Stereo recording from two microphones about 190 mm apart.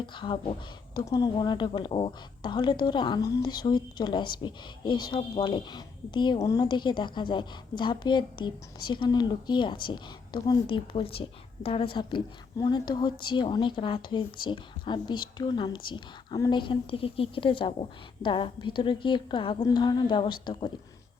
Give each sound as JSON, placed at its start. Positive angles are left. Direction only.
{"t": 0.0, "sound": "a woman's voice", "side_deg": 25}